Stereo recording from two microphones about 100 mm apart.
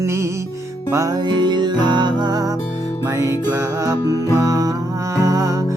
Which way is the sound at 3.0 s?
30° right (ahead or behind).